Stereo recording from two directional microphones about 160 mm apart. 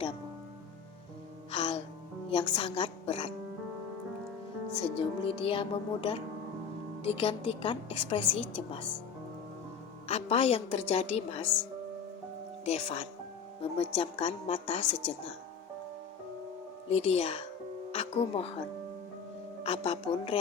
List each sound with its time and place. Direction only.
1.5 s music: 35° left (ahead or behind)
2.3 s a woman's voice: 35° left (ahead or behind)
4.8 s a woman's voice: 35° left (ahead or behind)
10.1 s a woman's voice: 40° left (ahead or behind)
12.6 s a woman's voice: 40° left (ahead or behind)
16.9 s a woman's voice: 40° left (ahead or behind)
19.6 s a woman's voice: 40° left (ahead or behind)